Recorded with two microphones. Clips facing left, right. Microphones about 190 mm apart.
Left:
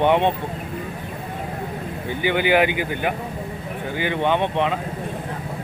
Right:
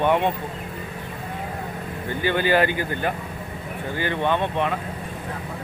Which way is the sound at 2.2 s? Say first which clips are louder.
Left 2 dB; 15° left (ahead or behind).